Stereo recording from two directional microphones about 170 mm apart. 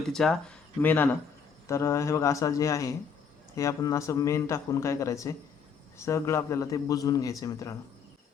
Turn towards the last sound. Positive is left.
turn(degrees=20)  # may be behind; listen again after turning